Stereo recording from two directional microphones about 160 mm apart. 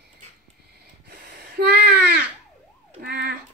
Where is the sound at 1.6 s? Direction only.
80° right.